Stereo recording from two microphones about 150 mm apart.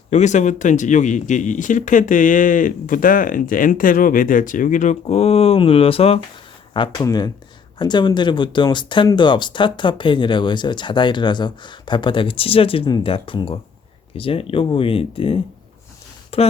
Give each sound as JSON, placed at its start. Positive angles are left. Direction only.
{"t": 0.1, "sound": "speech", "side_deg": 50}
{"t": 6.7, "sound": "speech", "side_deg": 30}